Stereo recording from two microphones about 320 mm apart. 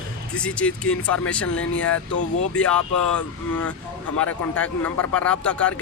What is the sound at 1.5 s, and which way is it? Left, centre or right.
Speech, left.